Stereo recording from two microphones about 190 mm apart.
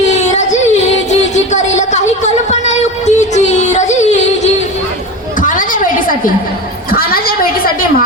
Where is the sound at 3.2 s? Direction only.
35° left (ahead or behind).